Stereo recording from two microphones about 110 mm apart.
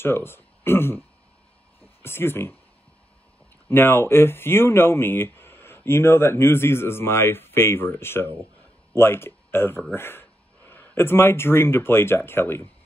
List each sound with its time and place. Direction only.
0.0 s speech: 20° left (ahead or behind)
2.0 s speech: 20° left (ahead or behind)
3.6 s speech: 20° left (ahead or behind)